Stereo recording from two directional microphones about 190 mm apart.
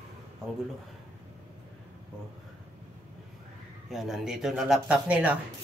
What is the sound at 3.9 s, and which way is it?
Speech, centre (ahead or behind).